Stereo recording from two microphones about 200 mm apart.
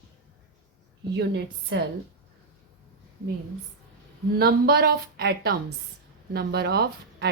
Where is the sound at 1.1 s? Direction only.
60° right (ahead or behind).